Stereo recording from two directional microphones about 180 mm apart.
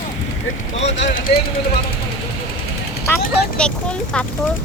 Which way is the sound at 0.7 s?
40° left (ahead or behind).